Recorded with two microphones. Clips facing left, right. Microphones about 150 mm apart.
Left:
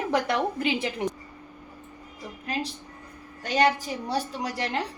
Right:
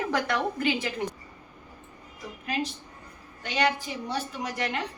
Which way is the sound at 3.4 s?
40° left (ahead or behind).